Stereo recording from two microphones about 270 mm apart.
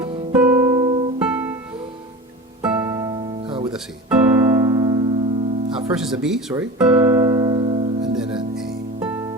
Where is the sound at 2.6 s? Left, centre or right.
Centre.